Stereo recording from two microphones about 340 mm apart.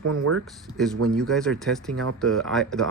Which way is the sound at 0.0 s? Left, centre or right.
Right.